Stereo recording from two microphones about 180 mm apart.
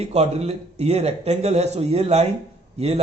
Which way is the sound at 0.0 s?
35° right (ahead or behind).